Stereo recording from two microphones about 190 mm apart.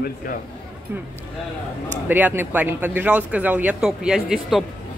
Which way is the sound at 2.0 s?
10° right (ahead or behind).